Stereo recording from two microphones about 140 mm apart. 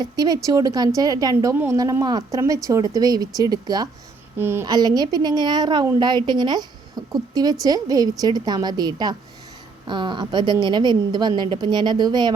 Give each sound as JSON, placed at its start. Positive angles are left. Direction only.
{"t": 0.0, "sound": "a woman's voice", "side_deg": -25}
{"t": 4.4, "sound": "a child's voice", "side_deg": -15}
{"t": 4.6, "sound": "a woman's voice", "side_deg": -30}